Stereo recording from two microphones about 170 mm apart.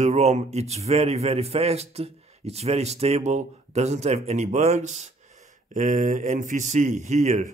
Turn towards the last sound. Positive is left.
turn(degrees=-45)  # may be behind; listen again after turning